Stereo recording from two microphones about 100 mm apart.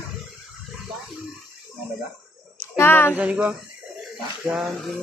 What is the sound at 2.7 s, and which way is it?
Speech, 20° left (ahead or behind).